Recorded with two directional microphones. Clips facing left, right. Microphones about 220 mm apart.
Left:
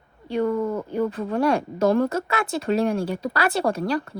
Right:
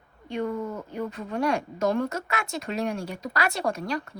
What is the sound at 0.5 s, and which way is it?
Speech, 60° left (ahead or behind).